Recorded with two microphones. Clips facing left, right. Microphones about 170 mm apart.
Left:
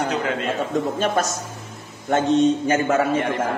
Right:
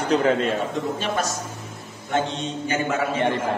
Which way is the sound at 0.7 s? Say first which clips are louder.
Left 4 dB; 45° left (ahead or behind).